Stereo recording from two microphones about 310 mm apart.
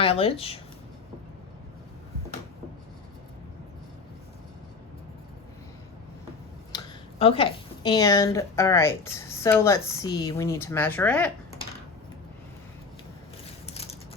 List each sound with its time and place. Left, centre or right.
0.0 s speech: centre
6.7 s speech: centre